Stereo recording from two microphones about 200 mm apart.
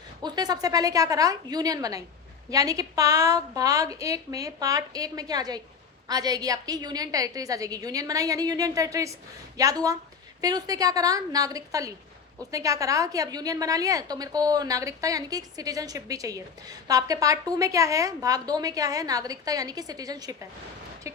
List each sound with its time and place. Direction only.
0.2 s a woman's voice: 20° right (ahead or behind)